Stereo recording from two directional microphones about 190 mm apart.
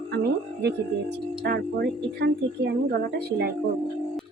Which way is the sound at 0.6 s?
65° right (ahead or behind).